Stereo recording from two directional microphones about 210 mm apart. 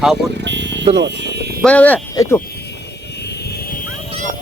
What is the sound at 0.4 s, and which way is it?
Vehicle, 55° right (ahead or behind).